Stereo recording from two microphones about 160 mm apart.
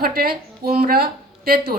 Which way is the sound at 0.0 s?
70° right (ahead or behind).